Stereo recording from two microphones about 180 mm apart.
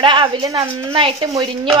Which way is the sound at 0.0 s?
25° right (ahead or behind).